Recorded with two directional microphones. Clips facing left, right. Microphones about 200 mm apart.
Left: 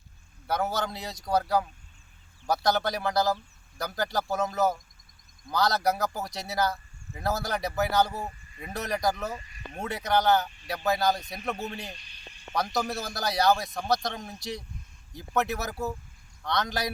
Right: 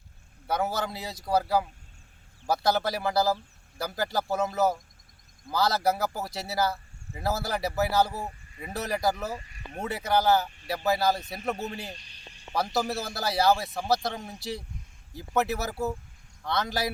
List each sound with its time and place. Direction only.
0.4 s speech: 5° right (ahead or behind)
11.9 s a sound: 35° right (ahead or behind)
12.7 s speech: 5° right (ahead or behind)